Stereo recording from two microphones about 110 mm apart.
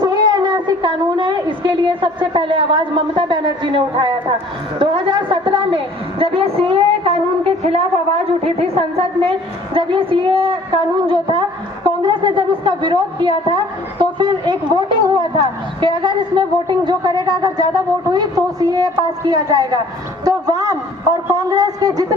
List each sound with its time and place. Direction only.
0.0 s a woman's voice: 40° right (ahead or behind); by 7.2 s 60° right (ahead or behind)
7.6 s a woman's voice: 70° right (ahead or behind); by 22.0 s 35° right (ahead or behind)